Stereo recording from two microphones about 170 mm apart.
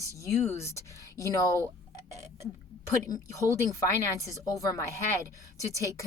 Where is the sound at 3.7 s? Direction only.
20° left (ahead or behind).